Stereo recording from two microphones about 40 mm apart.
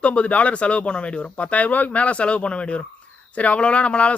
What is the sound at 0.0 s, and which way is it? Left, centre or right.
Speech, left.